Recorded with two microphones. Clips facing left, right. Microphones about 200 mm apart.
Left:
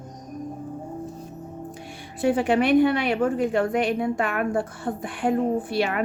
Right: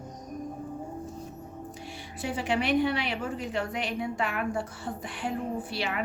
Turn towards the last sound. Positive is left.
turn(degrees=50)  # may be behind; listen again after turning